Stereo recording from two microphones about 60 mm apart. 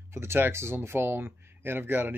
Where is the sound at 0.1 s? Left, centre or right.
Right.